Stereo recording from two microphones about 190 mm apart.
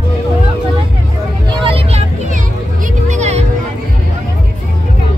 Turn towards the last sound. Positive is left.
turn(degrees=-35)  # may be behind; listen again after turning